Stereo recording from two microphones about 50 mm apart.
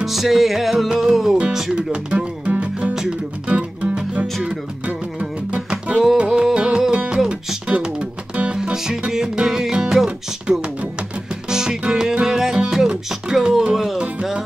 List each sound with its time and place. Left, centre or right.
0.0 s music: centre
1.8 s music: right